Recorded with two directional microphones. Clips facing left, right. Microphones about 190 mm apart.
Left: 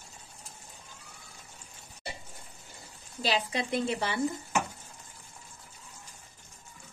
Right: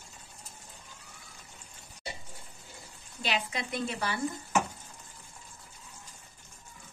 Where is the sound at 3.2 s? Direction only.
35° left (ahead or behind).